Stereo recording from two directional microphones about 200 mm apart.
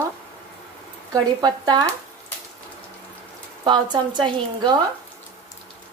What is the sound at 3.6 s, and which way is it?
A woman's voice, 20° right (ahead or behind).